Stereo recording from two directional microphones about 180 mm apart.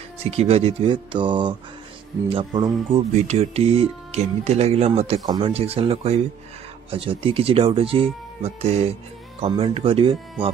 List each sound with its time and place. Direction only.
0.2 s speech: 35° right (ahead or behind)